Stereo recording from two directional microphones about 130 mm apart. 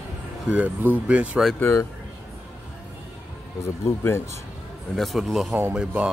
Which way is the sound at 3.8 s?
20° left (ahead or behind).